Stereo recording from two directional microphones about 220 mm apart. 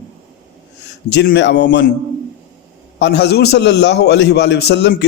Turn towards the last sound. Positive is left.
turn(degrees=50)  # may be behind; listen again after turning